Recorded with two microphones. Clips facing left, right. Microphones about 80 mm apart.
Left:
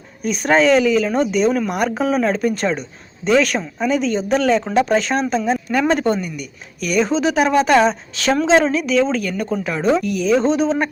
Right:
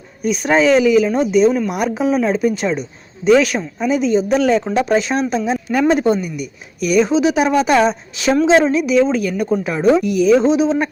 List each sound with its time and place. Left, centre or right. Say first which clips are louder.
0.2 s a woman's voice: right 1 dB; centre